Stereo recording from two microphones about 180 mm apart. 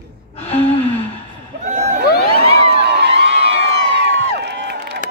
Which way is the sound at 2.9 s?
70° right (ahead or behind).